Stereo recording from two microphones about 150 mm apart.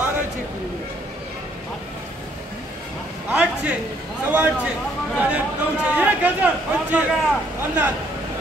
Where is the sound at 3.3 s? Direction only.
10° right (ahead or behind).